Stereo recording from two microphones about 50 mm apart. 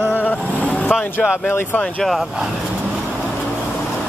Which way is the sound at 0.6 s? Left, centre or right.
Left.